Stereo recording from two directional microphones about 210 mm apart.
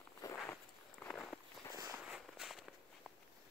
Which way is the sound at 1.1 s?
5° left (ahead or behind).